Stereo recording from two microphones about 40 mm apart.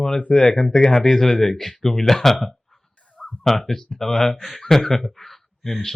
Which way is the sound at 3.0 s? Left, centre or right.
Left.